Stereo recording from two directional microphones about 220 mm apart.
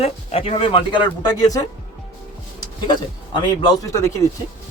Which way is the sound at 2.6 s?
20° left (ahead or behind).